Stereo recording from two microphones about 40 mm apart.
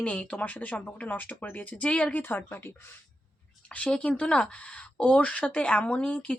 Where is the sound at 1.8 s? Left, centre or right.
Left.